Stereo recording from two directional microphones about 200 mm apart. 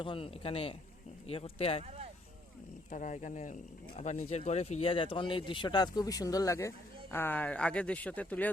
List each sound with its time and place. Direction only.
0.0 s speech: 25° left (ahead or behind)
2.9 s speech: 40° left (ahead or behind); by 8.4 s 5° left (ahead or behind)